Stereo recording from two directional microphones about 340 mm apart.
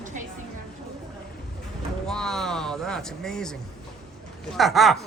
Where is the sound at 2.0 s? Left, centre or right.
Centre.